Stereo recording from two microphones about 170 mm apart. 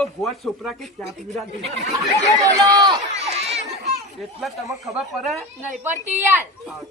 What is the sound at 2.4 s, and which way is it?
Speech, 20° right (ahead or behind).